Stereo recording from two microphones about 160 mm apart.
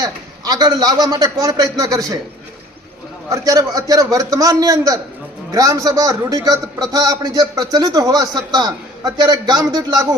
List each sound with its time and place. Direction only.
0.0 s a man's voice: 25° right (ahead or behind)
3.2 s a man's voice: 20° right (ahead or behind)